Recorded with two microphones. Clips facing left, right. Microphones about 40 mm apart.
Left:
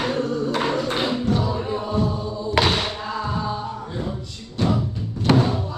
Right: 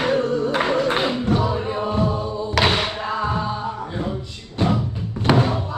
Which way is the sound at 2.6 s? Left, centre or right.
Centre.